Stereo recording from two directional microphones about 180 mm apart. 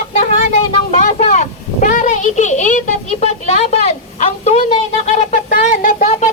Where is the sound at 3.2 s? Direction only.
35° left (ahead or behind).